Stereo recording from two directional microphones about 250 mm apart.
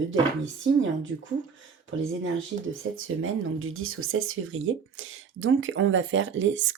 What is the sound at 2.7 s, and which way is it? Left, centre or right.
Speech, right.